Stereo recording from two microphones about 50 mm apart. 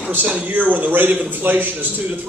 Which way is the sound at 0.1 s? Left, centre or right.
Right.